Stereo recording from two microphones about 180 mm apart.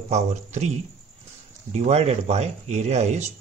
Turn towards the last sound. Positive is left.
turn(degrees=-40)  # may be behind; listen again after turning